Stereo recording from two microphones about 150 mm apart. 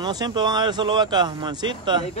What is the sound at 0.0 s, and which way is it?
Speech, 30° right (ahead or behind).